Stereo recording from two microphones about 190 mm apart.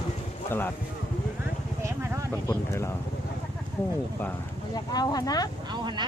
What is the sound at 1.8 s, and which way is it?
Vehicle, 15° right (ahead or behind).